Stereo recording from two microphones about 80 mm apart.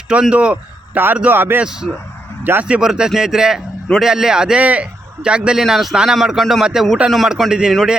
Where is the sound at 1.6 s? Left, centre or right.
Centre.